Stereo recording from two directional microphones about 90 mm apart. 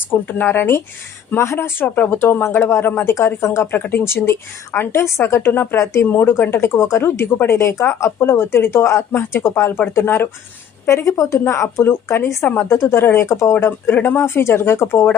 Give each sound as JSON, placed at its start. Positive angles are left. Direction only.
{"t": 0.1, "sound": "a woman's voice", "side_deg": 20}
{"t": 3.7, "sound": "a woman's voice", "side_deg": 20}